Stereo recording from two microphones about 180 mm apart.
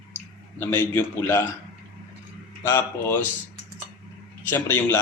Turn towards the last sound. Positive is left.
turn(degrees=10)  # may be behind; listen again after turning